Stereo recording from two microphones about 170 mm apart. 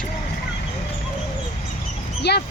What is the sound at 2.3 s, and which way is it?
Speech, 75° left (ahead or behind).